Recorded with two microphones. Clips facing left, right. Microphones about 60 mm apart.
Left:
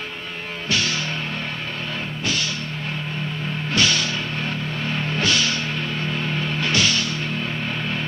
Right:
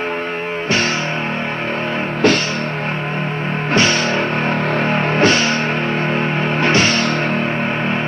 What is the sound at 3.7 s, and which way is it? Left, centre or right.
Music, right.